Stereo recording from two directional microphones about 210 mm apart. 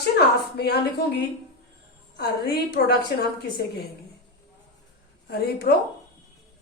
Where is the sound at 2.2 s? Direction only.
50° left (ahead or behind).